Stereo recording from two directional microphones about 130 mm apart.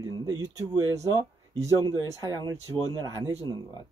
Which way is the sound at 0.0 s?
30° right (ahead or behind).